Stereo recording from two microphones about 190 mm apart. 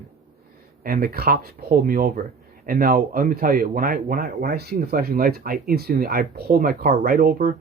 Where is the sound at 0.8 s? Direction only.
50° right (ahead or behind).